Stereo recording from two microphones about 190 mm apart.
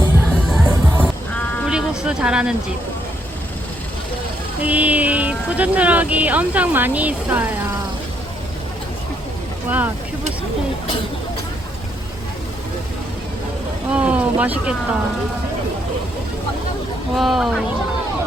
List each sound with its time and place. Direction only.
0.5 s music: 5° right (ahead or behind)
1.6 s vehicle: 5° right (ahead or behind)
4.6 s speech: 10° right (ahead or behind)
9.6 s speech: 10° right (ahead or behind)
13.9 s speech: 5° right (ahead or behind)
17.2 s speech: centre (ahead or behind)